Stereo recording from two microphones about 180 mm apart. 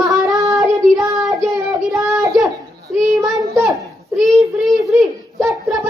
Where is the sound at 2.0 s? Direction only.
15° right (ahead or behind).